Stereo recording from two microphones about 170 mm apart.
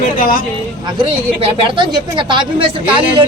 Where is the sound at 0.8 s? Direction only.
30° right (ahead or behind).